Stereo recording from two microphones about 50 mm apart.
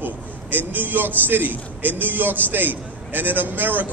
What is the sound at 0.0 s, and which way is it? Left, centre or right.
A man's voice, right.